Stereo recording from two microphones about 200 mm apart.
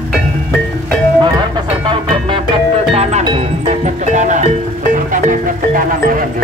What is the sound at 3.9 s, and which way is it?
Music, 40° right (ahead or behind).